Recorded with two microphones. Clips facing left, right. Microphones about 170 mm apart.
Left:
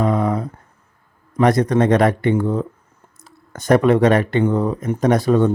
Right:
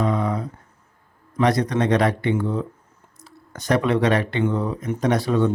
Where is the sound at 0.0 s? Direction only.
50° left (ahead or behind).